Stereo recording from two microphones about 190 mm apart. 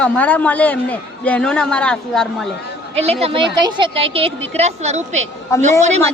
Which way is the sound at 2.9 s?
35° right (ahead or behind).